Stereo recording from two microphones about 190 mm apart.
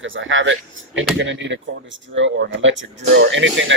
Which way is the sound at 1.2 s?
70° right (ahead or behind).